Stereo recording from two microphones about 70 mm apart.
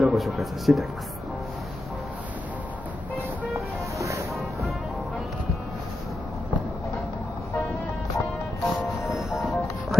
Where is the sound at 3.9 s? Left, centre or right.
Right.